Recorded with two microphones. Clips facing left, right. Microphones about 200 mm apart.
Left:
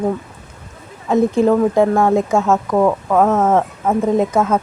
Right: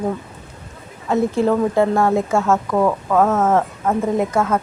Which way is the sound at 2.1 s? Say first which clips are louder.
Left 2 dB; 15° left (ahead or behind).